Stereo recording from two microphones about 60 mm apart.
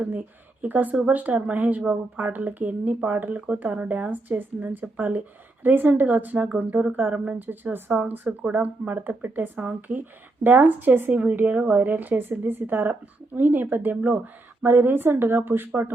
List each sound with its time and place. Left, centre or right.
0.6 s speech: right
14.6 s speech: right